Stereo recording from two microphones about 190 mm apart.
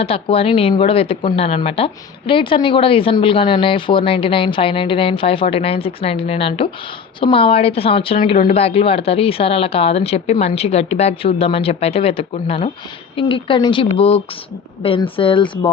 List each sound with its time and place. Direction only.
0.0 s speech: 30° left (ahead or behind)